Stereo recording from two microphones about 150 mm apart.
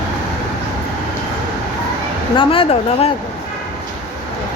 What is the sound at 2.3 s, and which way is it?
Speech, 35° left (ahead or behind).